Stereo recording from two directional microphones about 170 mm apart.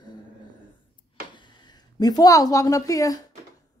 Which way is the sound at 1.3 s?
25° left (ahead or behind).